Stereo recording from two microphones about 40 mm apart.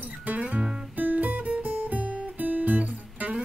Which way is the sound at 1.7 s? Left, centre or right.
Right.